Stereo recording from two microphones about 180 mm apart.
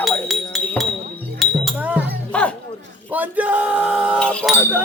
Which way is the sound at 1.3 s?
5° right (ahead or behind).